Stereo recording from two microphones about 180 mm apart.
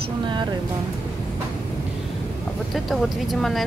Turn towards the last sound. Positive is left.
turn(degrees=0)  # may be behind; listen again after turning